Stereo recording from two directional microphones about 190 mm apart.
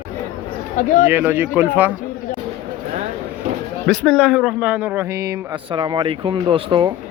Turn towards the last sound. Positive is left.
turn(degrees=-25)  # may be behind; listen again after turning